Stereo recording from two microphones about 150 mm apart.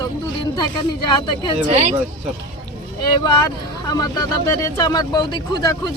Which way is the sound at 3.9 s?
25° left (ahead or behind).